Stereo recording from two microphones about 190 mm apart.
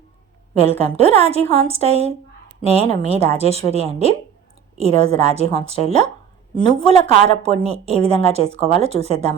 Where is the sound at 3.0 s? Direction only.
35° right (ahead or behind).